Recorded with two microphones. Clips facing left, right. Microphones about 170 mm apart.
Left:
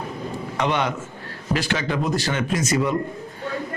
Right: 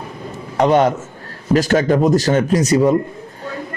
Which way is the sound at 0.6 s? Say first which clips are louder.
Right 10 dB; 40° right (ahead or behind).